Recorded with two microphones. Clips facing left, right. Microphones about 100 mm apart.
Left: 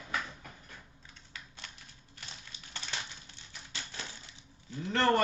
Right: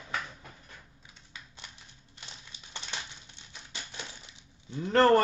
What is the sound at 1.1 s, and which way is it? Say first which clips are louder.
Typing: even; 15° right (ahead or behind).